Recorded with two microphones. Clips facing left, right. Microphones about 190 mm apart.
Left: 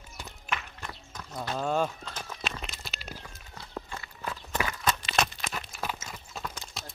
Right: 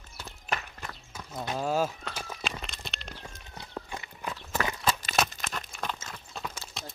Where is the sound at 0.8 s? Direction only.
5° right (ahead or behind).